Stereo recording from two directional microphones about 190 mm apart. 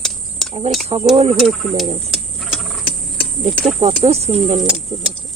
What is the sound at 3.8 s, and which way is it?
Speech, 35° right (ahead or behind).